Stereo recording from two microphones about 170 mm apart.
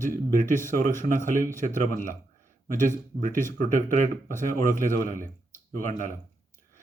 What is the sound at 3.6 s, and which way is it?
Speech, 50° right (ahead or behind).